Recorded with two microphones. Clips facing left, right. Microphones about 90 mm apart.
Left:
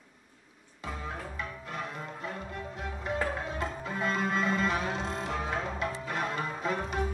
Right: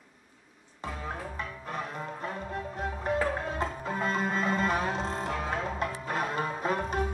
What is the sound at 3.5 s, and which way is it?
Music, 40° right (ahead or behind).